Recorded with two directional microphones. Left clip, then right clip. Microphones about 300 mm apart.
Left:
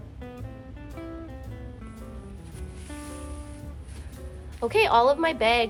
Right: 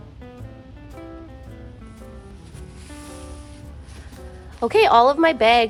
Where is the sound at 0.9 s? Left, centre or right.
Centre.